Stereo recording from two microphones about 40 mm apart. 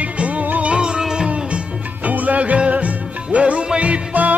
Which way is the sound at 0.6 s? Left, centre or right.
Right.